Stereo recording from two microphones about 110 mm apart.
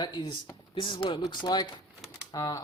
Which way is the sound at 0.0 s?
40° left (ahead or behind).